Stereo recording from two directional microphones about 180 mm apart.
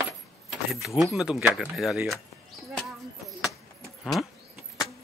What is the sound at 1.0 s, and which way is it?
Speech, centre (ahead or behind).